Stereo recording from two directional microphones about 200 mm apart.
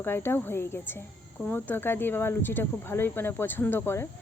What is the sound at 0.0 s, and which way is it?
Speech, 10° left (ahead or behind).